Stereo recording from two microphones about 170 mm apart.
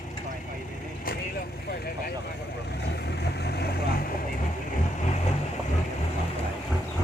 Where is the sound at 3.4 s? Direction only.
70° left (ahead or behind).